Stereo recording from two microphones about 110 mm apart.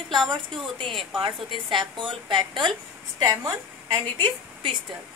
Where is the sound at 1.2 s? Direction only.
50° right (ahead or behind).